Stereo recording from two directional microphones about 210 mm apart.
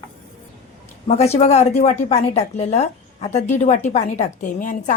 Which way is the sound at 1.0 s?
30° left (ahead or behind).